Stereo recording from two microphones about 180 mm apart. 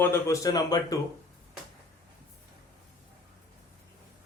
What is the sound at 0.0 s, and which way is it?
Speech, 15° left (ahead or behind).